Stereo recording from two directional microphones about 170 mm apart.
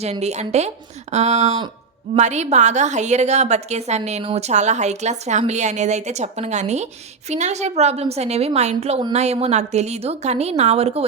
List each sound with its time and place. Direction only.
0.0 s a woman's voice: 40° right (ahead or behind)